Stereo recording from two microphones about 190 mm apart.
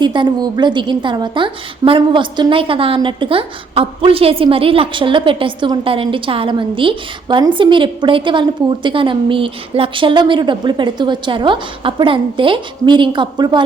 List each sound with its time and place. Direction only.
0.0 s a woman's voice: 25° right (ahead or behind)